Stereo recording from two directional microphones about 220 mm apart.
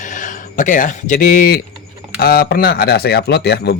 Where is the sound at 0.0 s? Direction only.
35° left (ahead or behind).